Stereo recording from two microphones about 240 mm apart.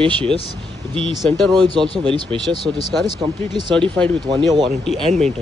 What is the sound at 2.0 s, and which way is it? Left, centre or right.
Speech, right.